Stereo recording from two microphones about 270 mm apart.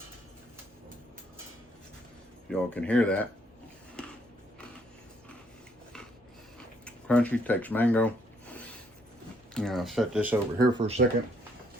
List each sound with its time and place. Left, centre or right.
2.5 s speech: centre
4.0 s a sound: centre
6.8 s speech: centre
9.6 s speech: centre
10.8 s speech: right